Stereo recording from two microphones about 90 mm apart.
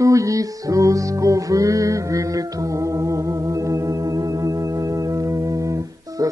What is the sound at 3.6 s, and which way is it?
Music, 40° right (ahead or behind).